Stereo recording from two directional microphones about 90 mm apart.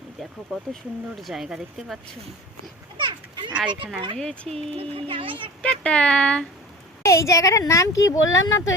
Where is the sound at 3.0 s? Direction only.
60° right (ahead or behind).